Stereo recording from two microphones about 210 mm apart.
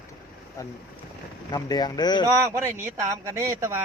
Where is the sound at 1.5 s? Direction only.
20° left (ahead or behind).